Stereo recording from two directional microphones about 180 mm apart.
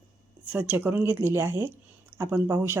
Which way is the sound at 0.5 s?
10° right (ahead or behind).